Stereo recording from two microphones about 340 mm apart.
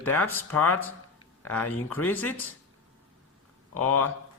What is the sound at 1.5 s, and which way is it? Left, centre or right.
Speech, left.